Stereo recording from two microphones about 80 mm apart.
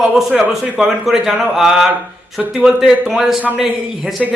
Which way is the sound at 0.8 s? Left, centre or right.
Centre.